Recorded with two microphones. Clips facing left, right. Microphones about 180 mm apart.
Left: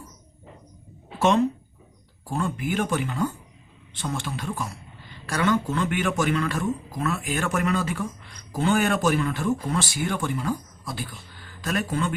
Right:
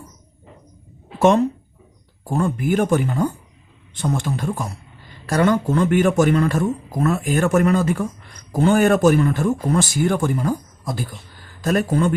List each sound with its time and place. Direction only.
1.2 s speech: 45° right (ahead or behind)